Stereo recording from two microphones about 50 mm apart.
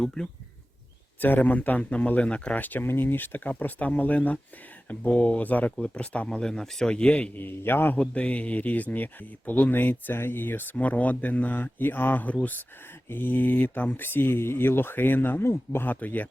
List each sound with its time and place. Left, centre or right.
0.0 s speech: centre
1.2 s speech: left
2.6 s speech: left
5.7 s speech: left
7.3 s speech: left
8.1 s speech: left
16.0 s speech: left